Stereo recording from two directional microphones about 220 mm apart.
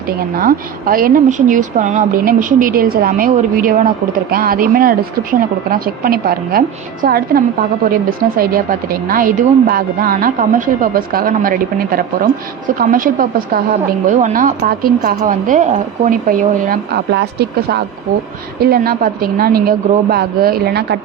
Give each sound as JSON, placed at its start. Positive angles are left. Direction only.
{"t": 0.3, "sound": "a woman's voice", "side_deg": -40}